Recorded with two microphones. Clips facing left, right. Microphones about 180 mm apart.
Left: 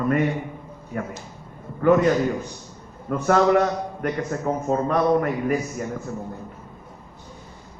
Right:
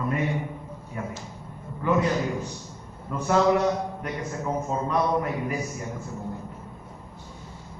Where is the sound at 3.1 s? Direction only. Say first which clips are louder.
Left 3 dB; 65° left (ahead or behind).